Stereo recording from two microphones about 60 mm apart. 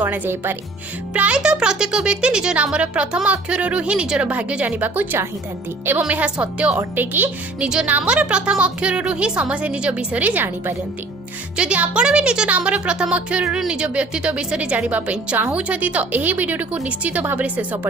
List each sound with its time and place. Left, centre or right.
0.0 s speech: right
1.1 s a woman's voice: right
6.2 s a woman's voice: centre
11.5 s a woman's voice: right